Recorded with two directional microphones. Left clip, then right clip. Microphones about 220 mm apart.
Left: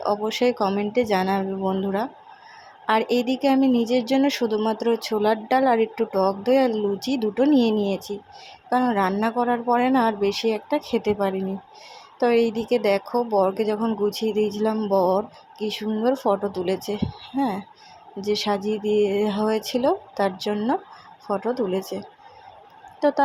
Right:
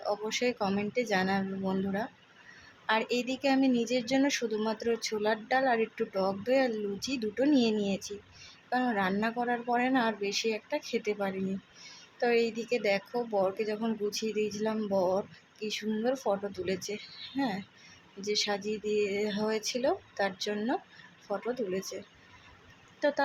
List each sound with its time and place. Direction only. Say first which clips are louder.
0.0 s speech: left 9 dB; 20° left (ahead or behind)
2.8 s speech: left 9 dB; 20° left (ahead or behind)
23.0 s a woman's voice: left 8 dB; 20° left (ahead or behind)